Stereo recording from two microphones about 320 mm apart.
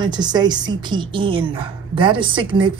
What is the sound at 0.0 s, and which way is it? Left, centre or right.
A woman's voice, centre.